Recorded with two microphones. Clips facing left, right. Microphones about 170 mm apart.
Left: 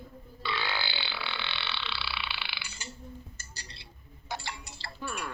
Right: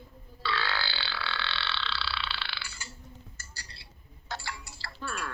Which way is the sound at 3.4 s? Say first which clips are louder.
Left 1 dB; 20° left (ahead or behind).